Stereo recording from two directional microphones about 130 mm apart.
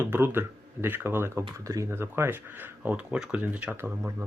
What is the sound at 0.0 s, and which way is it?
Speech, 15° right (ahead or behind).